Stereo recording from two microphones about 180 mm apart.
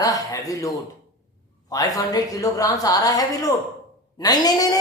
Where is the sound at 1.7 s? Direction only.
20° left (ahead or behind).